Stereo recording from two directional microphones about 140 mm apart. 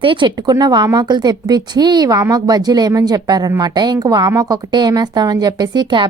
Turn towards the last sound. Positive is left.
turn(degrees=-35)  # may be behind; listen again after turning